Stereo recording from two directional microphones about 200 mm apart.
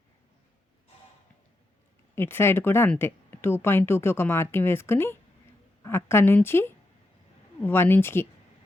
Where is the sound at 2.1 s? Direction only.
10° left (ahead or behind).